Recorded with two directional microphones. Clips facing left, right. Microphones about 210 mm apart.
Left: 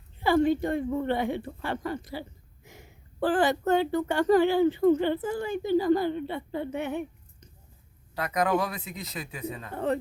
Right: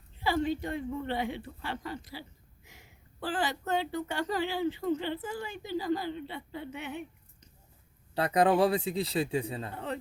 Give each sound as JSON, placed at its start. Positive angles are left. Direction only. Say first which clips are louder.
{"t": 0.2, "sound": "speech", "louder": "left 7 dB", "side_deg": 50}
{"t": 8.1, "sound": "a man's voice", "louder": "right 2 dB", "side_deg": -30}
{"t": 9.7, "sound": "speech", "louder": "left 13 dB", "side_deg": 50}